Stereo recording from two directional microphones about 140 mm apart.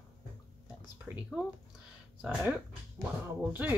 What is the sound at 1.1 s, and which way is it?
Speech, 5° right (ahead or behind).